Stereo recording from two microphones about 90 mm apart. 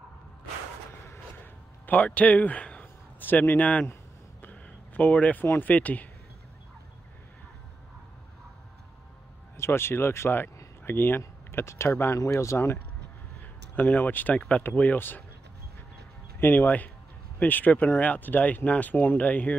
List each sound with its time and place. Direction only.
1.0 s a sound: 25° left (ahead or behind)
4.4 s speech: 20° left (ahead or behind)
9.6 s speech: 25° left (ahead or behind)
13.7 s speech: 20° left (ahead or behind)
16.3 s speech: 25° left (ahead or behind)